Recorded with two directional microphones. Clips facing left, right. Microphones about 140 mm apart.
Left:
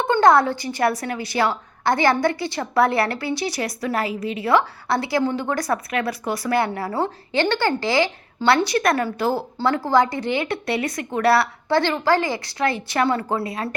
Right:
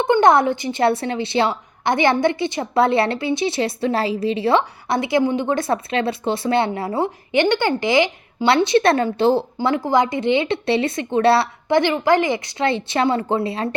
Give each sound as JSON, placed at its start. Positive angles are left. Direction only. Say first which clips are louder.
{"t": 0.0, "sound": "speech", "louder": "right 2 dB", "side_deg": -20}